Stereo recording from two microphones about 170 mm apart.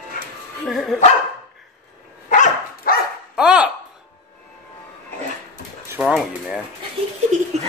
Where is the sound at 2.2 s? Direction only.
50° left (ahead or behind).